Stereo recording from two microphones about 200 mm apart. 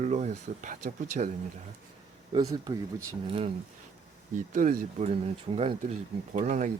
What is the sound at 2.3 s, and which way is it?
Speech, 20° right (ahead or behind).